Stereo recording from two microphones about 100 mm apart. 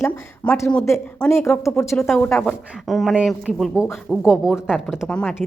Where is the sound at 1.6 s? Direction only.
30° left (ahead or behind).